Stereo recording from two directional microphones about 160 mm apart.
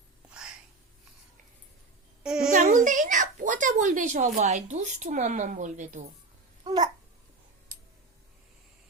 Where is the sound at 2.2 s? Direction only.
5° right (ahead or behind).